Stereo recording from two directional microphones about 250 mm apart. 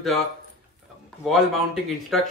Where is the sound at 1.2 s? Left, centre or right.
Centre.